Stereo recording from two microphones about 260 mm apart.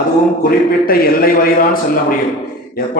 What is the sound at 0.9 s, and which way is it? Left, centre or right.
A man's voice, left.